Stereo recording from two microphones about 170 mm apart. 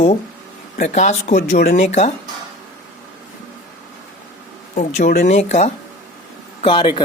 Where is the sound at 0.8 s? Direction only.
45° left (ahead or behind).